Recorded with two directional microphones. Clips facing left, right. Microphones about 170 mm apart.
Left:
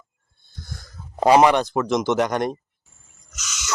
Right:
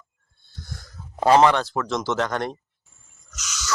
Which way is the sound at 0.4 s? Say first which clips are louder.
Left 1 dB; 15° left (ahead or behind).